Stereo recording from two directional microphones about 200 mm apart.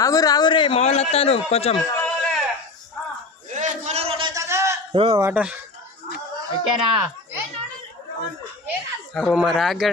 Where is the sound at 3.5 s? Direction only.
35° right (ahead or behind); by 4.8 s 15° right (ahead or behind).